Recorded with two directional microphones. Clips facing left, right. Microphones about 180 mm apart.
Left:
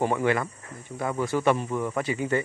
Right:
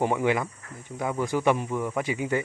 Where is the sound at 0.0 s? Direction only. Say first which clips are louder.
Even; 15° right (ahead or behind).